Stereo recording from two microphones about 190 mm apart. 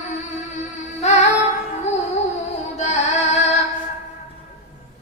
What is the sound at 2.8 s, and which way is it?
Music, 35° left (ahead or behind).